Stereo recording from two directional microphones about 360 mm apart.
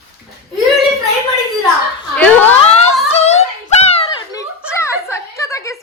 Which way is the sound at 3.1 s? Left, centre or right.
Centre.